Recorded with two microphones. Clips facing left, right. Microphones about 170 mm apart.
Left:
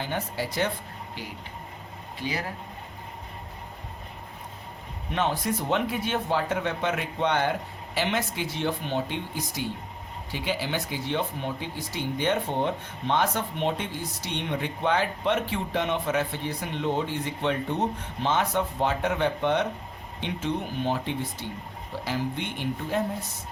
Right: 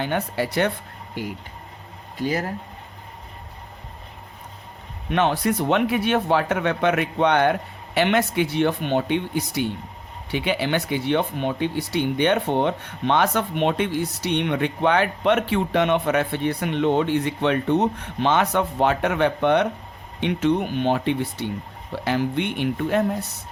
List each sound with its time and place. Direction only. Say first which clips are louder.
0.0 s speech: right 6 dB; 65° right (ahead or behind)
2.1 s speech: right 7 dB; 45° right (ahead or behind)
5.1 s speech: right 6 dB; 70° right (ahead or behind)